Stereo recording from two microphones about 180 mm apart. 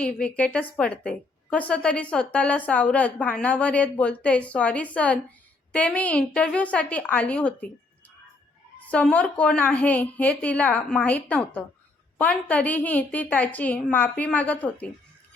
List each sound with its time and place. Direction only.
0.0 s a woman's voice: 5° left (ahead or behind)
8.9 s a woman's voice: 5° left (ahead or behind)